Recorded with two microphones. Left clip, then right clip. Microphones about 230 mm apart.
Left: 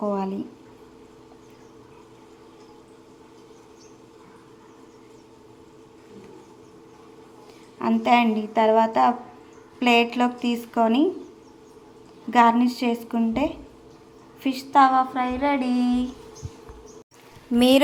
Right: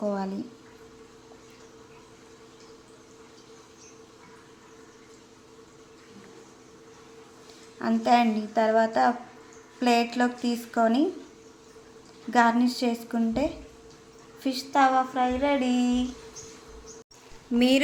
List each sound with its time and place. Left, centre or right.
0.0 s speech: centre
7.8 s speech: centre
12.3 s speech: centre
17.6 s speech: centre